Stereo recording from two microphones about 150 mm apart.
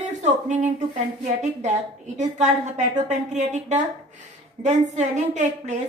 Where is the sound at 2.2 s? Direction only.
50° right (ahead or behind).